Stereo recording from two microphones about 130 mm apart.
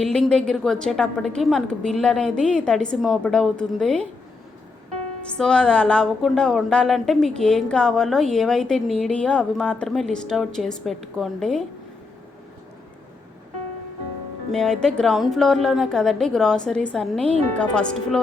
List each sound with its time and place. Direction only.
0.0 s a woman's voice: 5° left (ahead or behind)
5.3 s a woman's voice: 5° left (ahead or behind)
14.5 s a woman's voice: 5° left (ahead or behind)